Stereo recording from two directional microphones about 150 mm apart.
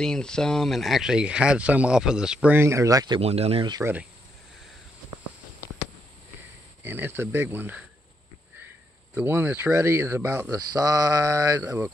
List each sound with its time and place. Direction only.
0.0 s speech: 5° left (ahead or behind); by 3.2 s 25° right (ahead or behind)
3.2 s speech: 45° right (ahead or behind)
3.8 s speech: 10° right (ahead or behind)
6.8 s speech: 15° right (ahead or behind)
9.1 s speech: 15° right (ahead or behind)
10.7 s mantra: 25° right (ahead or behind)
11.6 s speech: 10° right (ahead or behind)